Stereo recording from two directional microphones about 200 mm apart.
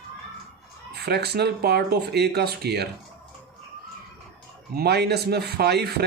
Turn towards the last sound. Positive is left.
turn(degrees=-55)  # may be behind; listen again after turning